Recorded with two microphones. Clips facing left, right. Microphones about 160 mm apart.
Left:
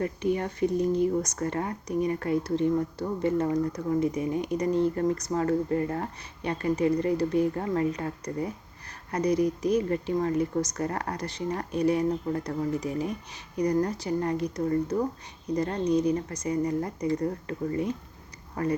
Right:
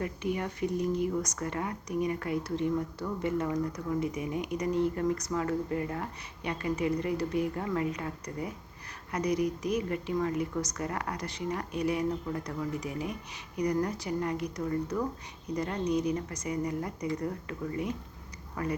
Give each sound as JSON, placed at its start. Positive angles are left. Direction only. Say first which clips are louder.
{"t": 0.0, "sound": "speech", "louder": "left 5 dB", "side_deg": 35}